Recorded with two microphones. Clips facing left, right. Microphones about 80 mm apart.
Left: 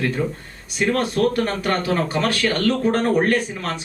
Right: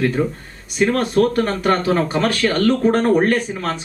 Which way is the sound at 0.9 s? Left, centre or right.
Right.